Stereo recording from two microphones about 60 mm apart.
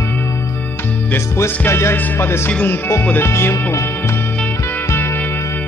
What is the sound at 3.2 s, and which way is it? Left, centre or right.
Music, left.